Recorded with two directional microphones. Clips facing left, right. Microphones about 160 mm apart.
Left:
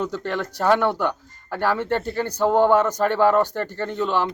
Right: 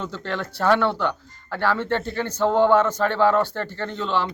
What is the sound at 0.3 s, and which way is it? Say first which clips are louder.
A man's voice: even; 15° left (ahead or behind).